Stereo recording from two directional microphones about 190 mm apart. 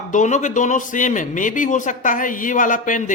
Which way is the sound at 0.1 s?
40° left (ahead or behind).